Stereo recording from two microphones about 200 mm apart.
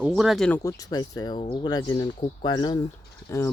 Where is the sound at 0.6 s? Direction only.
20° left (ahead or behind).